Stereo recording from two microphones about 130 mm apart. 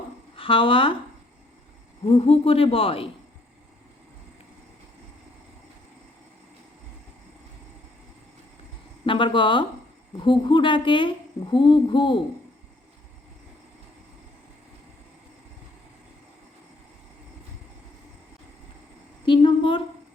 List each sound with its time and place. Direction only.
0.3 s speech: 40° left (ahead or behind)
2.0 s speech: 50° left (ahead or behind)
9.0 s a woman's voice: 40° left (ahead or behind)
19.2 s a sound: 40° left (ahead or behind)